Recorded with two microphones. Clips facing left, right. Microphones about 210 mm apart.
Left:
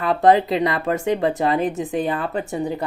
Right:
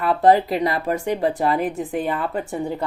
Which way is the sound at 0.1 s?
20° left (ahead or behind).